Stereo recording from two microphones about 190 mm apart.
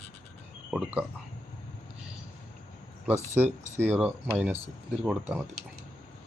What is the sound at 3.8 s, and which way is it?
Speech, 10° right (ahead or behind).